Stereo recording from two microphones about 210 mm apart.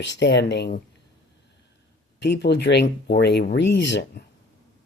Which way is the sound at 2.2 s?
55° left (ahead or behind).